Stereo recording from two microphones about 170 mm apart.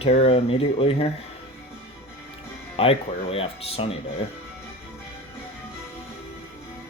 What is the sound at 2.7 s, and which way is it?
Speech, 35° left (ahead or behind).